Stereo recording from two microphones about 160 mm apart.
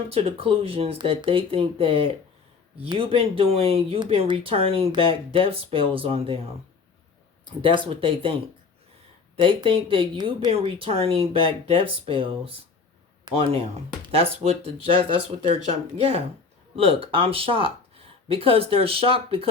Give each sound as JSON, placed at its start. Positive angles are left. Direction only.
{"t": 0.1, "sound": "speech", "side_deg": -35}
{"t": 7.7, "sound": "speech", "side_deg": -35}